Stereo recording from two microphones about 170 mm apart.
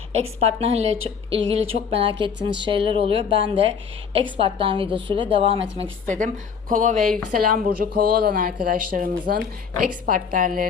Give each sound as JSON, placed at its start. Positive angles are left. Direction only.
{"t": 0.3, "sound": "a woman's voice", "side_deg": -35}
{"t": 6.1, "sound": "speech", "side_deg": -50}